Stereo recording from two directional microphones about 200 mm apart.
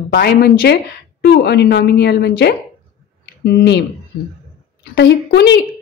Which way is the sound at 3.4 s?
55° left (ahead or behind).